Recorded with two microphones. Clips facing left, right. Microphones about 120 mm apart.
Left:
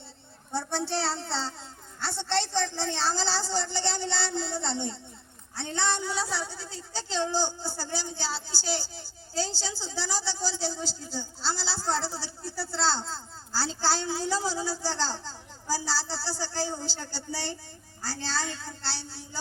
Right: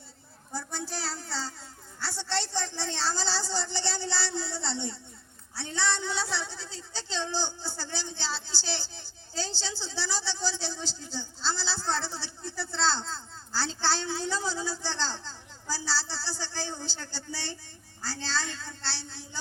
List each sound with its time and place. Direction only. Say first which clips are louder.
0.5 s a child's voice: left 7 dB; 30° left (ahead or behind)
4.6 s speech: left 2 dB; 55° left (ahead or behind)
5.5 s a child's voice: left 1 dB; 20° left (ahead or behind)
6.1 s a woman's voice: left 1 dB; 5° left (ahead or behind); by 18.7 s 20° left (ahead or behind)